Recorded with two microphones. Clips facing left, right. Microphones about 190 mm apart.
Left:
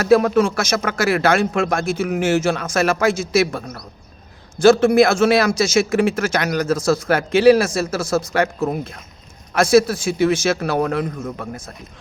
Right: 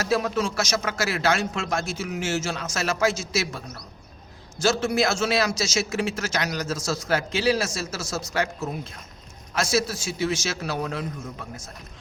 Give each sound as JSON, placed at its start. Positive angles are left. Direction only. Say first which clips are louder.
{"t": 0.0, "sound": "a man's voice", "louder": "left 10 dB", "side_deg": 55}